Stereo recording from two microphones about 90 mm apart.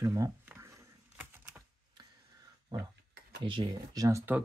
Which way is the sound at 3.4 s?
70° right (ahead or behind).